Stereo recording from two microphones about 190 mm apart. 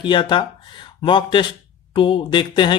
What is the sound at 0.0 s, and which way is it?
Speech, 25° left (ahead or behind).